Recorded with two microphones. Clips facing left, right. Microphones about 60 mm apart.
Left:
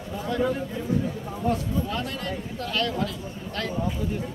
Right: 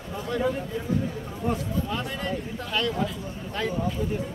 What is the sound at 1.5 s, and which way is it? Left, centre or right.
A man's voice, centre.